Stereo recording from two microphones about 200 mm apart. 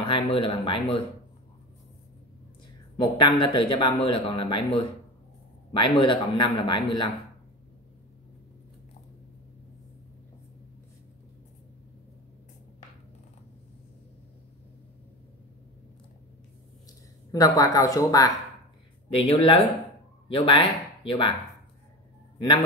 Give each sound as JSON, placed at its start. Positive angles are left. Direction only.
{"t": 0.0, "sound": "a man's voice", "side_deg": 25}
{"t": 3.0, "sound": "a man's voice", "side_deg": 25}
{"t": 5.7, "sound": "a man's voice", "side_deg": 25}
{"t": 17.3, "sound": "a woman's voice", "side_deg": 15}
{"t": 19.1, "sound": "a man's voice", "side_deg": 30}